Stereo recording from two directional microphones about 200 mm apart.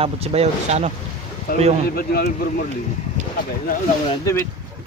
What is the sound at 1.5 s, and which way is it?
Speech, 45° left (ahead or behind).